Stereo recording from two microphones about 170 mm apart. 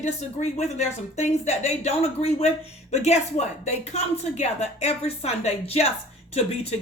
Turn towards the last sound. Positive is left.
turn(degrees=35)  # may be behind; listen again after turning